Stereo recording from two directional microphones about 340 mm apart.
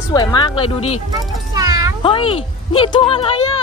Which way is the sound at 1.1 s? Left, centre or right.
Centre.